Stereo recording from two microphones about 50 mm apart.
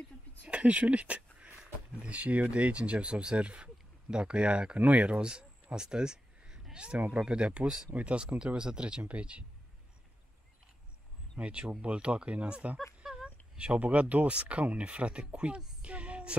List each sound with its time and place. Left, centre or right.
0.5 s a sound: right
1.6 s speech: right
11.3 s speech: right